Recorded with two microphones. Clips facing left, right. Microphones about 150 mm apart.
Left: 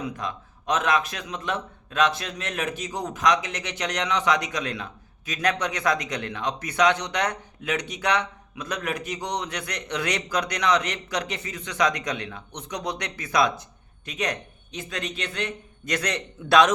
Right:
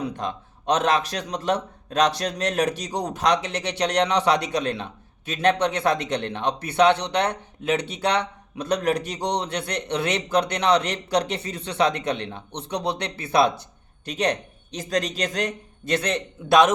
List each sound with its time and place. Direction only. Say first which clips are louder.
0.0 s speech: right 3 dB; 30° right (ahead or behind)
15.9 s a man's voice: right 4 dB; 25° right (ahead or behind)